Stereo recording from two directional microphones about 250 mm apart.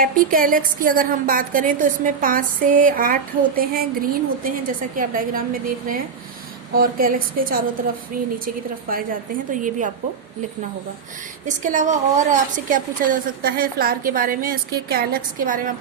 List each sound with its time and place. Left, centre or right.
0.0 s a woman's voice: right
9.5 s a woman's voice: right
11.4 s a woman's voice: right